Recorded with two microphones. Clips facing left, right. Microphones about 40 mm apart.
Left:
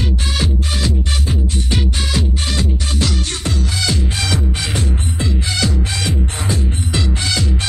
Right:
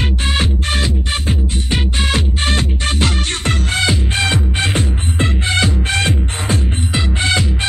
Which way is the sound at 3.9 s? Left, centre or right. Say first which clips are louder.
Right 3 dB; right.